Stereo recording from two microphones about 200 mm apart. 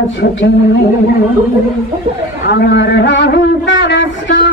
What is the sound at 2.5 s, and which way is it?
A man's voice, 60° left (ahead or behind).